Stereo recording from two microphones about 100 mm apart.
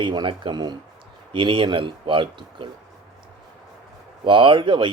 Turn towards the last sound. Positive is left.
turn(degrees=-55)  # may be behind; listen again after turning